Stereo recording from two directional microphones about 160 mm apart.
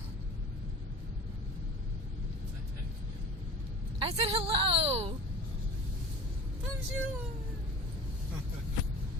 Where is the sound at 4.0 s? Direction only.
35° right (ahead or behind).